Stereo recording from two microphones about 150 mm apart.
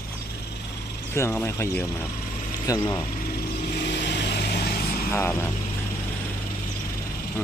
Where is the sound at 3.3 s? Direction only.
90° left.